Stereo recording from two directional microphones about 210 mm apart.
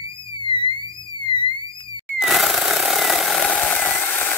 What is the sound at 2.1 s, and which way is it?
Jackhammer, centre (ahead or behind).